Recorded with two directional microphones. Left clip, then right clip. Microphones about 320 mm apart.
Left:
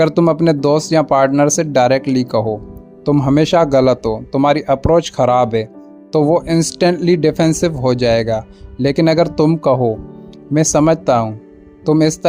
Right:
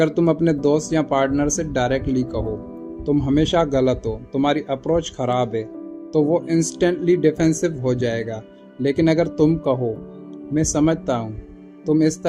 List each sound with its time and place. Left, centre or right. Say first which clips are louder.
0.0 s speech: left 6 dB; left